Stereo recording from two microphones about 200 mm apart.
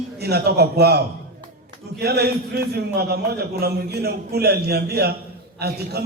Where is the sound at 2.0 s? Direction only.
55° right (ahead or behind).